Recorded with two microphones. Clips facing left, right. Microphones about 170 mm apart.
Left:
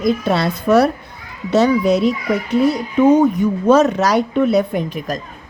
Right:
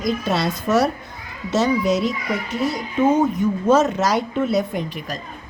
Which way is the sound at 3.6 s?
65° left (ahead or behind).